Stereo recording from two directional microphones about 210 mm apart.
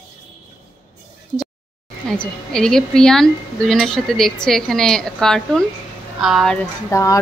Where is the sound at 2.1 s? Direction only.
5° left (ahead or behind).